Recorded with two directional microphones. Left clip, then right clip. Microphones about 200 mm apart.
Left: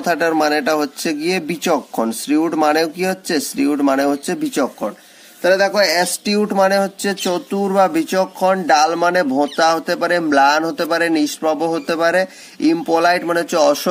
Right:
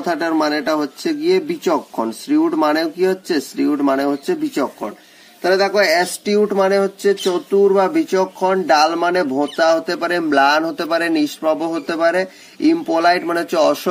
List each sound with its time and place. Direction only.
0.0 s speech: 40° left (ahead or behind)
5.4 s speech: 25° left (ahead or behind)